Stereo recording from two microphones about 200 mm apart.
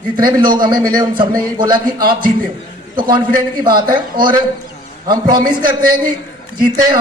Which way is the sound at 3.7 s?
20° right (ahead or behind).